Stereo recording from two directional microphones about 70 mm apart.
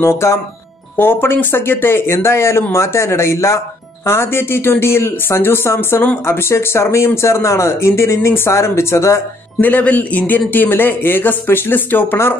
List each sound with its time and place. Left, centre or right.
0.0 s speech: left
9.6 s speech: left